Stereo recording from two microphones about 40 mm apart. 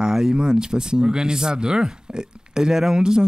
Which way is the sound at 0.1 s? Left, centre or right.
Centre.